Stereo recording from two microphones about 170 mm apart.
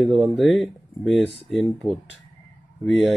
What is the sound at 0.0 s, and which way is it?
Speech, centre (ahead or behind).